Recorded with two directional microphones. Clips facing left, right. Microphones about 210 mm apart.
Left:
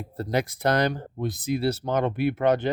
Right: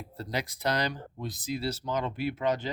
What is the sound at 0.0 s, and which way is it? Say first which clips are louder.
Speech: left 8 dB; 50° left (ahead or behind).